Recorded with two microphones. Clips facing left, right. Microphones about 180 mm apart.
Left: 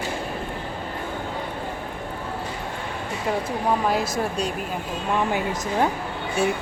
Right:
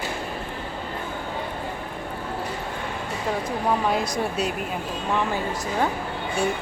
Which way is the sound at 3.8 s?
Centre (ahead or behind).